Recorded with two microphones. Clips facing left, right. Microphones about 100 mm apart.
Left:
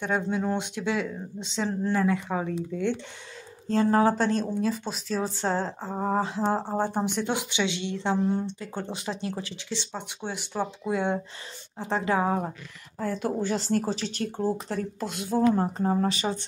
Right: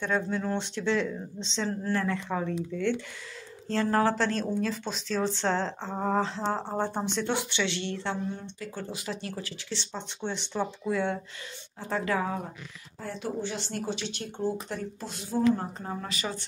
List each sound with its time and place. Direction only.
0.0 s speech: 15° left (ahead or behind)
3.6 s speech: 20° left (ahead or behind)
13.0 s speech: 45° left (ahead or behind)
15.0 s speech: 60° left (ahead or behind)
15.5 s speech: 40° left (ahead or behind)